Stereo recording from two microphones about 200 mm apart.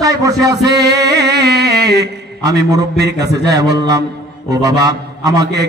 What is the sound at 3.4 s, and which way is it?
A man's voice, 20° right (ahead or behind).